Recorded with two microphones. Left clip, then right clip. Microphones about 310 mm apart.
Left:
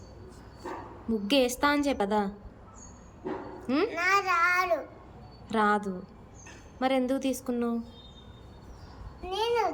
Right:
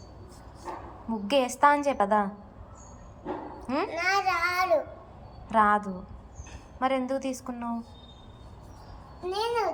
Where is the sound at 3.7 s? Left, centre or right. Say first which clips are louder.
Left 1 dB; centre.